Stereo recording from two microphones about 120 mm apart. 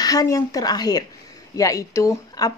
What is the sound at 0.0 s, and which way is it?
Speech, 30° left (ahead or behind).